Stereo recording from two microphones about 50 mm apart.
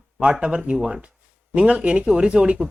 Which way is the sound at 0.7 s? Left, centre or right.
Centre.